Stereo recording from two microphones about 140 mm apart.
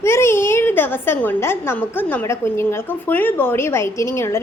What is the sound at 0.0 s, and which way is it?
A woman's voice, 20° left (ahead or behind).